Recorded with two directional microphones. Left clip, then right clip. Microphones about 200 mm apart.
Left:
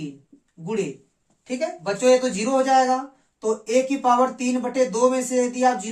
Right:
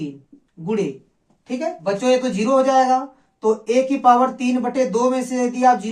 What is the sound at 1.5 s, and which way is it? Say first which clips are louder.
Speech: right 3 dB; 25° left (ahead or behind).